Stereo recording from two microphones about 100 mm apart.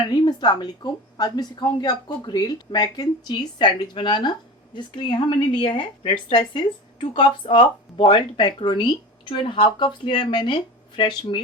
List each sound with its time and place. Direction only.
0.1 s a woman's voice: 45° left (ahead or behind)